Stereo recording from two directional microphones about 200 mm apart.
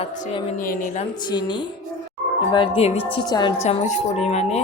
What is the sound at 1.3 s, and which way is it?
Speech, 20° left (ahead or behind).